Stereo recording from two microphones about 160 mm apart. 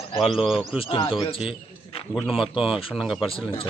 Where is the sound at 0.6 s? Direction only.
35° left (ahead or behind).